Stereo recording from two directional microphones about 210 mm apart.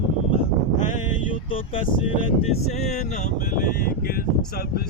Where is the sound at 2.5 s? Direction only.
30° left (ahead or behind).